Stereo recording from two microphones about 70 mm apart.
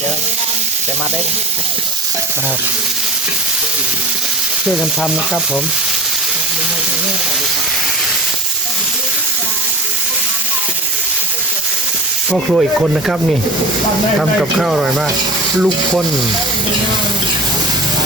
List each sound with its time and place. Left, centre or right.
12.3 s speech: centre
14.2 s speech: centre